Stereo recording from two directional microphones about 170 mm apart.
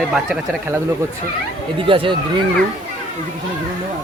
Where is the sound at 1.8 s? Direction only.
30° right (ahead or behind).